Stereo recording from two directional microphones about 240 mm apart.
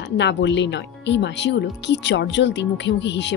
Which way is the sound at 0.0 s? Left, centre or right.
Left.